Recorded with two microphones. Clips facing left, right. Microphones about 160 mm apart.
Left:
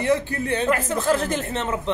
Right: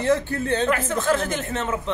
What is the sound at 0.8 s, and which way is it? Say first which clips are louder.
Speech: left 1 dB; 35° left (ahead or behind).